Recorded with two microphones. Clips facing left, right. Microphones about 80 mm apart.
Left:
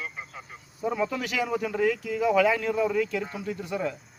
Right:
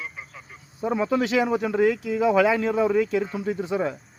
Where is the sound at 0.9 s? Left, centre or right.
Right.